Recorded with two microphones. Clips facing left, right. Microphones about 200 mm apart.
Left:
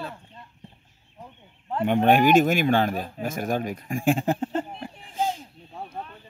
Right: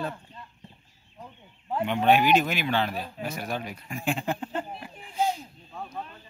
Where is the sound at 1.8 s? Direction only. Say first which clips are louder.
Left 3 dB; 50° left (ahead or behind).